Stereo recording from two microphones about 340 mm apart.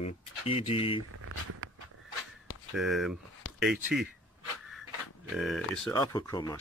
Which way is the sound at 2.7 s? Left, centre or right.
Centre.